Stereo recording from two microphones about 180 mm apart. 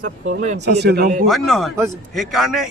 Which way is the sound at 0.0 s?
45° right (ahead or behind).